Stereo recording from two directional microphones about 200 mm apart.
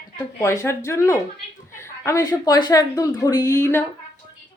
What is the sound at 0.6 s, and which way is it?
A woman's voice, 15° left (ahead or behind).